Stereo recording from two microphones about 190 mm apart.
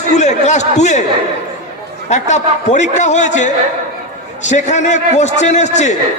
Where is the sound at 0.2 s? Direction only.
35° left (ahead or behind).